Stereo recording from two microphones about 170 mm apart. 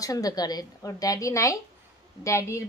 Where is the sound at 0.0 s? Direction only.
20° left (ahead or behind).